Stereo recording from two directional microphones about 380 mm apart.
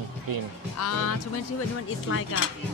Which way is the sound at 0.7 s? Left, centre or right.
Left.